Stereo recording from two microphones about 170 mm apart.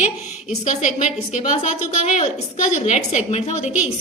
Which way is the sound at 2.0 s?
45° left (ahead or behind).